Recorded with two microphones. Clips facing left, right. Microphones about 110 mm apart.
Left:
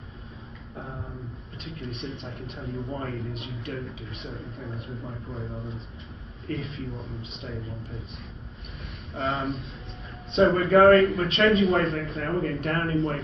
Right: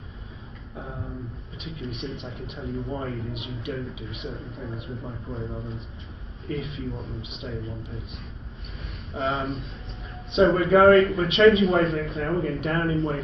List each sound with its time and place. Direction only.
0.7 s a man's voice: centre (ahead or behind)
9.1 s a man's voice: centre (ahead or behind)